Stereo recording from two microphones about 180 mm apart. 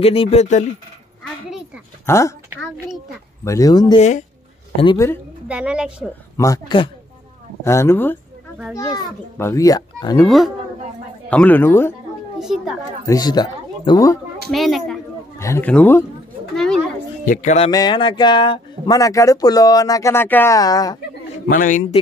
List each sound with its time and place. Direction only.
0.0 s speech: 30° left (ahead or behind)
2.0 s speech: 15° left (ahead or behind)
3.4 s speech: 20° left (ahead or behind)
5.5 s a woman's voice: 5° right (ahead or behind)
6.3 s speech: 20° left (ahead or behind)
10.2 s a woman's voice: centre (ahead or behind)
12.4 s a woman's voice: centre (ahead or behind)
13.0 s speech: 20° left (ahead or behind)
14.5 s a woman's voice: centre (ahead or behind)
15.3 s a woman's voice: 15° left (ahead or behind)
17.3 s speech: 40° left (ahead or behind)
17.6 s speech: 20° left (ahead or behind)
21.5 s a man's voice: 45° left (ahead or behind)